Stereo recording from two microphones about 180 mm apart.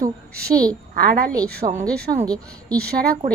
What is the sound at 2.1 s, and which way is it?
Speech, 45° right (ahead or behind).